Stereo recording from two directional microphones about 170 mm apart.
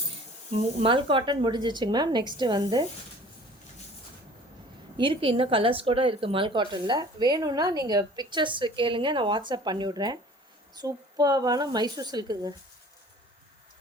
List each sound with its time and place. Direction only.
0.5 s speech: 35° right (ahead or behind)
4.9 s speech: 30° right (ahead or behind)